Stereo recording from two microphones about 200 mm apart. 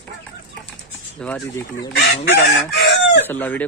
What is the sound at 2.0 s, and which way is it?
Chicken, 55° left (ahead or behind).